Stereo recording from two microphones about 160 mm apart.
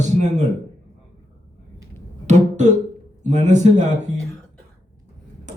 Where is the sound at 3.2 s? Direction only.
50° right (ahead or behind).